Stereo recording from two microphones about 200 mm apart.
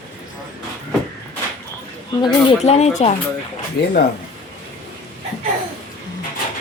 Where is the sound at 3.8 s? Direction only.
50° left (ahead or behind).